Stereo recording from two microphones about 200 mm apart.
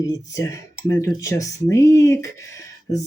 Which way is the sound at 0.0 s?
15° left (ahead or behind).